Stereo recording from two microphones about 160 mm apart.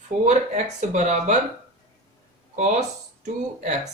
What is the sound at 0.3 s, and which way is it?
Speech, 50° right (ahead or behind).